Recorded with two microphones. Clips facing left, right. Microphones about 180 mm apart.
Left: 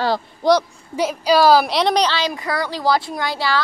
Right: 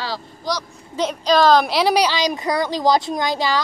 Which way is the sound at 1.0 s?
10° left (ahead or behind).